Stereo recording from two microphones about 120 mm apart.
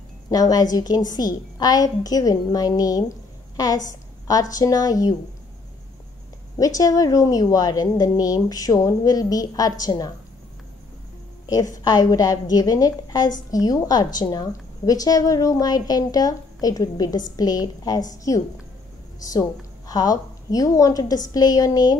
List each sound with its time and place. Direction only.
0.3 s a woman's voice: 30° left (ahead or behind)
6.6 s a woman's voice: 30° left (ahead or behind)
11.4 s a woman's voice: 30° left (ahead or behind)